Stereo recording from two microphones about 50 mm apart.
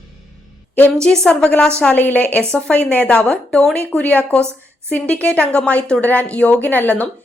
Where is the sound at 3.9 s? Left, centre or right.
Left.